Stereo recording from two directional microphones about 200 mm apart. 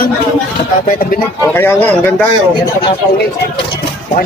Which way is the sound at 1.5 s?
10° left (ahead or behind).